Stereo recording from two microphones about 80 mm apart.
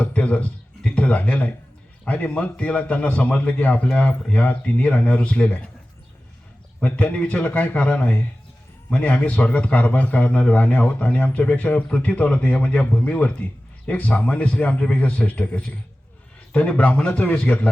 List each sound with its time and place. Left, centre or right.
0.0 s a man's voice: centre
6.7 s a man's voice: centre